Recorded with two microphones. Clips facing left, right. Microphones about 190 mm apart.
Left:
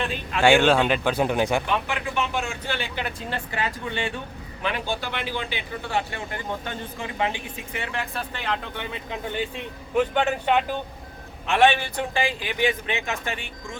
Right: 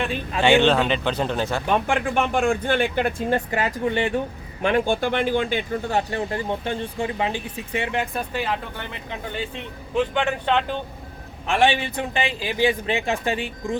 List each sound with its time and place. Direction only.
0.4 s speech: 10° left (ahead or behind)
1.7 s speech: 50° right (ahead or behind)
6.5 s speech: 25° right (ahead or behind)
8.3 s speech: 10° right (ahead or behind)
9.9 s speech: 10° left (ahead or behind)
11.7 s speech: 25° right (ahead or behind)